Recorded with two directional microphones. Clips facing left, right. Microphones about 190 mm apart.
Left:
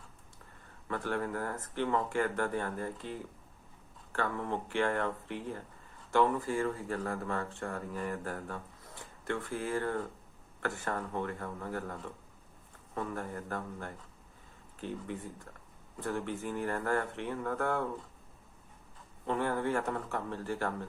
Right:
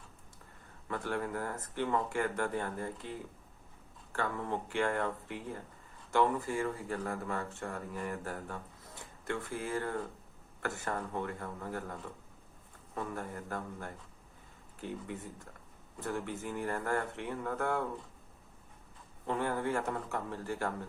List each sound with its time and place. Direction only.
0.9 s speech: 15° right (ahead or behind)
19.3 s speech: 15° right (ahead or behind)